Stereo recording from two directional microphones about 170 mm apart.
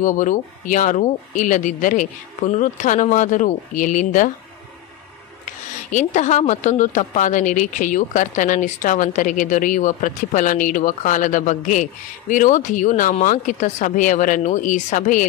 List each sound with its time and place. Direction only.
0.0 s speech: 50° left (ahead or behind)
5.4 s speech: 45° left (ahead or behind)